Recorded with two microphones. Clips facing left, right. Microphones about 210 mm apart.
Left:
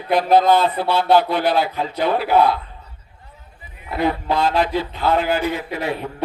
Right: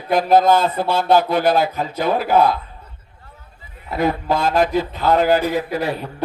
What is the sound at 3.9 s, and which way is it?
A man's voice, 45° right (ahead or behind).